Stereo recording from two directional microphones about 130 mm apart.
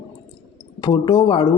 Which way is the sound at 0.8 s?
35° left (ahead or behind).